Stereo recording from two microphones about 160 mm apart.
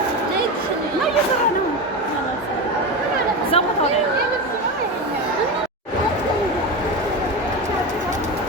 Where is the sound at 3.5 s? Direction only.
40° left (ahead or behind).